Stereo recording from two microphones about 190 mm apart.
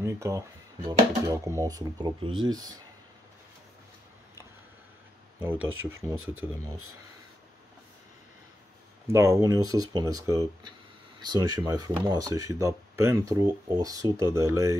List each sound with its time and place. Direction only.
0.0 s speech: 15° right (ahead or behind)
5.6 s speech: 90° right
9.1 s speech: 15° right (ahead or behind)